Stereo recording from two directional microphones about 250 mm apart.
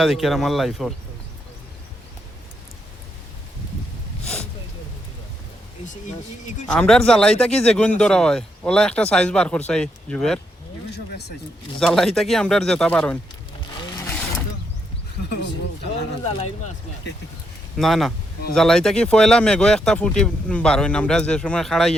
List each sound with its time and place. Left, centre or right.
0.0 s speech: centre
6.7 s speech: centre
11.8 s speech: centre
14.0 s a sound: centre
16.2 s speech: left
17.7 s speech: centre